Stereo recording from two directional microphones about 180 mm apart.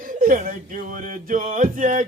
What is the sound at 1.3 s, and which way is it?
Music, 45° right (ahead or behind).